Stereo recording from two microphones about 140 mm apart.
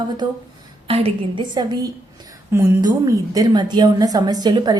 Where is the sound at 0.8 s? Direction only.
40° right (ahead or behind).